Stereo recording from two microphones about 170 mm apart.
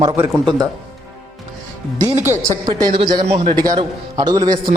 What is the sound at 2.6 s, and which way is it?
Speech, 30° right (ahead or behind).